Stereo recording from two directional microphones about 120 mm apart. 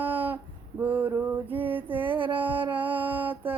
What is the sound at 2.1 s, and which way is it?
Female singing, 45° right (ahead or behind).